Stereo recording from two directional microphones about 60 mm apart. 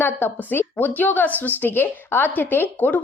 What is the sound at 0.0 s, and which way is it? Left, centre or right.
A woman's voice, left.